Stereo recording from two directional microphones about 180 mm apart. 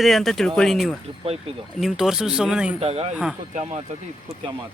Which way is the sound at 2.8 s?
35° right (ahead or behind).